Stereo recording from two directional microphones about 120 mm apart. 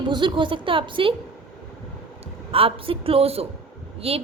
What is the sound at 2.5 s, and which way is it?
A woman's voice, 50° right (ahead or behind).